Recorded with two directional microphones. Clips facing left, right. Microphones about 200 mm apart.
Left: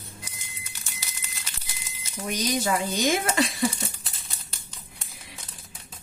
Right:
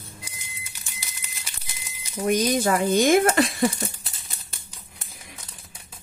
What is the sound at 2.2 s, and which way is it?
Speech, 50° right (ahead or behind).